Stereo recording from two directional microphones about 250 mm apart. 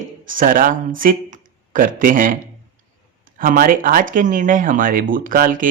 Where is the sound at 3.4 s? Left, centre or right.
Right.